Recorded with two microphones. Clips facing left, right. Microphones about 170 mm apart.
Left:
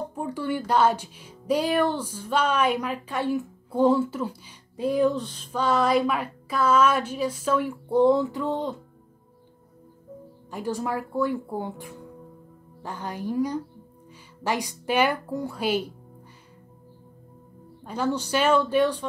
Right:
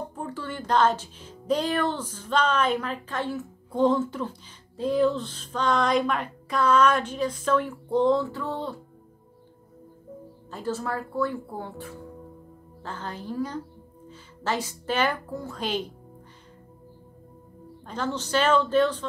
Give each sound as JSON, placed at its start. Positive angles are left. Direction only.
{"t": 0.1, "sound": "speech", "side_deg": 15}
{"t": 10.5, "sound": "speech", "side_deg": 15}
{"t": 17.8, "sound": "speech", "side_deg": 10}